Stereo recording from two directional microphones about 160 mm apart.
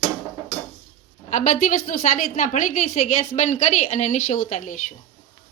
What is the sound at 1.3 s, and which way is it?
A woman's voice, 50° left (ahead or behind).